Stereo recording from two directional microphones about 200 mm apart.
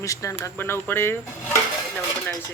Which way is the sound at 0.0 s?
15° left (ahead or behind).